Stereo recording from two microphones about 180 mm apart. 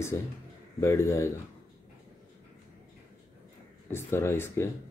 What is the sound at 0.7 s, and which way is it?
Speech, 15° left (ahead or behind).